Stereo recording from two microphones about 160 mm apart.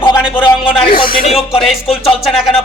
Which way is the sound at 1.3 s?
Centre (ahead or behind).